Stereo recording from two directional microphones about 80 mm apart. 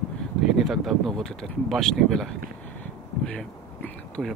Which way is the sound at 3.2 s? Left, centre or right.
Centre.